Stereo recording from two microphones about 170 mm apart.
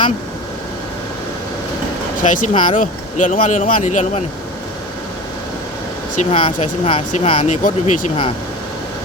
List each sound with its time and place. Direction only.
2.2 s speech: 50° left (ahead or behind)
6.3 s speech: 35° left (ahead or behind)